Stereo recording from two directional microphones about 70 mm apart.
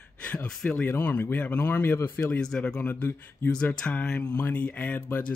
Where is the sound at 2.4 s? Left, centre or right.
Centre.